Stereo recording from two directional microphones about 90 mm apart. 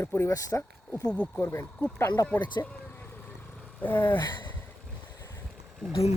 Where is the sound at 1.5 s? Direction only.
25° left (ahead or behind).